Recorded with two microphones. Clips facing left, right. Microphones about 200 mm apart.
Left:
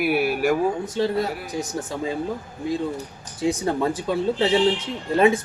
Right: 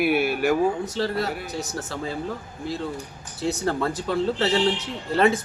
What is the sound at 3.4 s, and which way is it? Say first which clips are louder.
Speech: left 3 dB; 15° left (ahead or behind).